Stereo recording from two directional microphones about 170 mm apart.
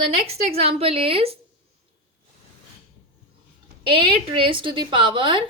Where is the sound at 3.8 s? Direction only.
30° right (ahead or behind).